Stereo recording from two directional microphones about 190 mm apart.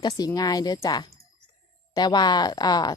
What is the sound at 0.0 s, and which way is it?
Speech, 20° left (ahead or behind).